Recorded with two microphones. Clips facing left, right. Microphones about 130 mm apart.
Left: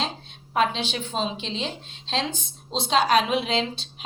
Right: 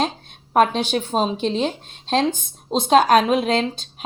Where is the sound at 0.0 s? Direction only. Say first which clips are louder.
Right 7 dB; 50° right (ahead or behind).